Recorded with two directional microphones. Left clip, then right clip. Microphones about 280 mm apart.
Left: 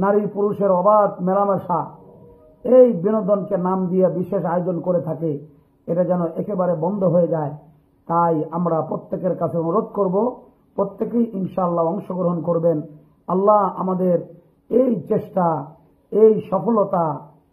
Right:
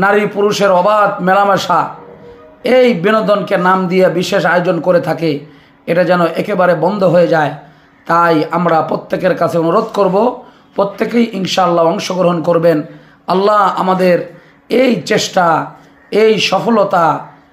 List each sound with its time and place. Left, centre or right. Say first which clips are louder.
0.0 s a man's voice: right 8 dB; right